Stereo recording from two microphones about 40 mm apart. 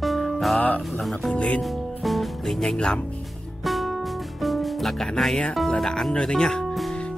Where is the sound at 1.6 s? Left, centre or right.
Centre.